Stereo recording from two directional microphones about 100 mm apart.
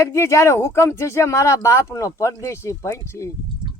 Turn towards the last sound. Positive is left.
turn(degrees=30)  # may be behind; listen again after turning